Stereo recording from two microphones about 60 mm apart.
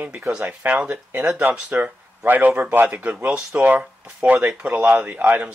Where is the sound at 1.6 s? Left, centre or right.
Right.